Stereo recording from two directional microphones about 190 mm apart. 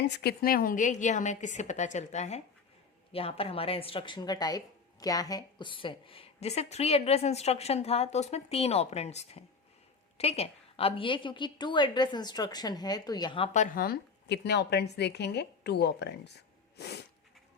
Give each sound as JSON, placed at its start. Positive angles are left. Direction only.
{"t": 0.0, "sound": "a woman's voice", "side_deg": 55}
{"t": 13.5, "sound": "a woman's voice", "side_deg": 40}
{"t": 16.7, "sound": "sneeze", "side_deg": 60}